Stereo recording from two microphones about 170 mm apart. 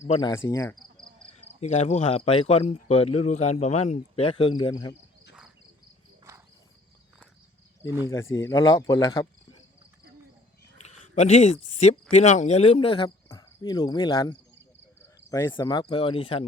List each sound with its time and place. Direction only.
0.2 s speech: 25° left (ahead or behind)
1.2 s cricket: 35° left (ahead or behind)
1.6 s speech: 40° left (ahead or behind); by 4.9 s 25° left (ahead or behind)
7.9 s speech: 15° right (ahead or behind)
8.1 s speech: 15° left (ahead or behind)
10.8 s a sound: 40° left (ahead or behind)
12.1 s speech: 45° left (ahead or behind)
13.2 s cricket: 20° left (ahead or behind)
15.3 s speech: 20° left (ahead or behind)